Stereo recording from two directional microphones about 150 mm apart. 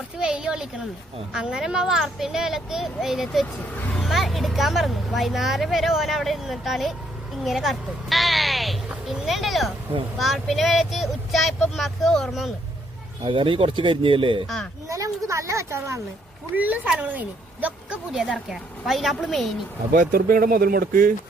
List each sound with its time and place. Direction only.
0.2 s a sound: 5° right (ahead or behind)
1.3 s speech: 5° right (ahead or behind)
7.4 s sheep: centre (ahead or behind)
10.2 s speech: centre (ahead or behind)
13.2 s speech: 35° right (ahead or behind)
14.8 s speech: 20° right (ahead or behind); by 19.5 s centre (ahead or behind)
19.9 s speech: 70° right (ahead or behind)